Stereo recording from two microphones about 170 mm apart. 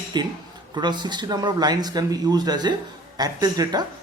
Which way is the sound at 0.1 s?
25° right (ahead or behind).